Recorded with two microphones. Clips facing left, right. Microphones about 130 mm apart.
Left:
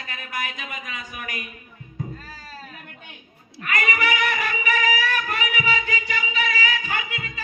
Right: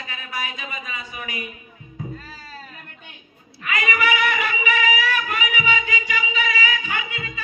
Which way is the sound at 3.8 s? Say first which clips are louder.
Right 2 dB; 45° left (ahead or behind).